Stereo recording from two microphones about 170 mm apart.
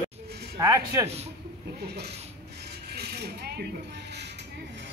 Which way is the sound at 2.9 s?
70° right (ahead or behind).